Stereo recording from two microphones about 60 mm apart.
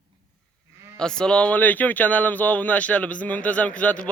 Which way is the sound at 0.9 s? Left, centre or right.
Centre.